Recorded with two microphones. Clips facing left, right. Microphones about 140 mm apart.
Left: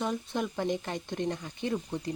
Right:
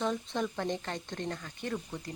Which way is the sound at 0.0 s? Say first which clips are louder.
Left 1 dB; 10° left (ahead or behind).